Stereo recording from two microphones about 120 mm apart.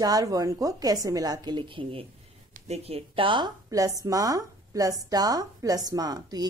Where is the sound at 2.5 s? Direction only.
60° right (ahead or behind); by 3.5 s 45° right (ahead or behind).